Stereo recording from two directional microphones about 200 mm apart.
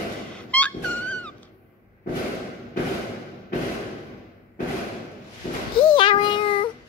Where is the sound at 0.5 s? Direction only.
5° left (ahead or behind).